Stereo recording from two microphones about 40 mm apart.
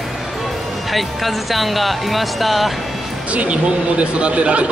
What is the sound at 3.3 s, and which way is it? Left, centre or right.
Speech, right.